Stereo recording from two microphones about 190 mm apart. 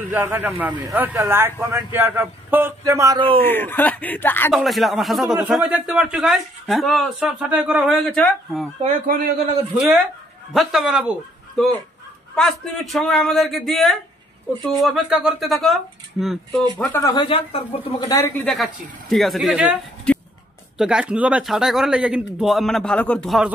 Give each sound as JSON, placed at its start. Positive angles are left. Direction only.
{"t": 0.1, "sound": "a man's voice", "side_deg": -10}
{"t": 3.4, "sound": "speech", "side_deg": 10}
{"t": 4.6, "sound": "speech", "side_deg": 0}
{"t": 8.8, "sound": "speech", "side_deg": -50}
{"t": 9.8, "sound": "a man's voice", "side_deg": -5}
{"t": 17.0, "sound": "speech", "side_deg": 25}
{"t": 18.0, "sound": "speech", "side_deg": 15}
{"t": 20.1, "sound": "a sound", "side_deg": 5}
{"t": 20.7, "sound": "speech", "side_deg": -5}